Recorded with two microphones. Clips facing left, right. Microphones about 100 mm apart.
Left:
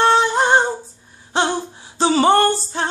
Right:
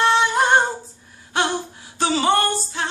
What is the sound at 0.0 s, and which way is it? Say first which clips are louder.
Female singing: left 2 dB; 35° left (ahead or behind).